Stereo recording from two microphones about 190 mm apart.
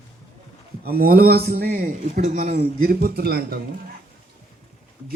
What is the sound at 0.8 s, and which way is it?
Speech, 55° right (ahead or behind).